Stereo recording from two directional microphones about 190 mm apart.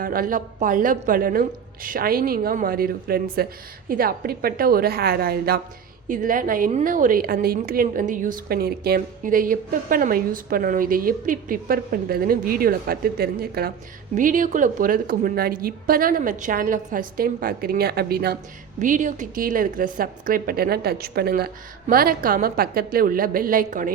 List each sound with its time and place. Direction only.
0.0 s a woman's voice: 50° right (ahead or behind)
18.8 s a woman's voice: 40° right (ahead or behind)